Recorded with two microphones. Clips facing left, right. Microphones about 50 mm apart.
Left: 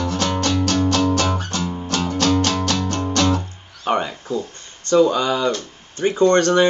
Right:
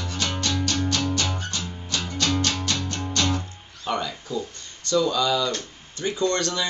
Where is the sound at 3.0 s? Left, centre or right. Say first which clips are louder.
Left 7 dB; left.